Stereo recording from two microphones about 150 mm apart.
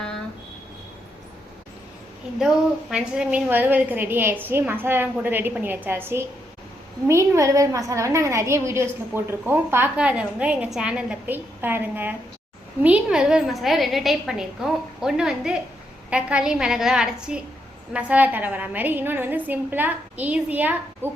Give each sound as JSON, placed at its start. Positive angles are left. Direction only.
{"t": 2.9, "sound": "a woman's voice", "side_deg": -5}